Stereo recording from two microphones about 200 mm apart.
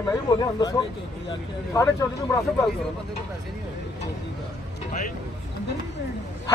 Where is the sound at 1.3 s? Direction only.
20° left (ahead or behind).